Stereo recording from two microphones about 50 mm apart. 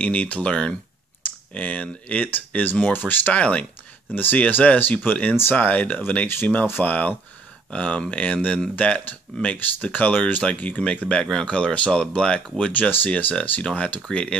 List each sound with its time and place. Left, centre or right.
0.0 s speech: left
5.3 s speech: left
5.6 s speech: left
11.0 s speech: right
11.4 s speech: left
12.7 s speech: left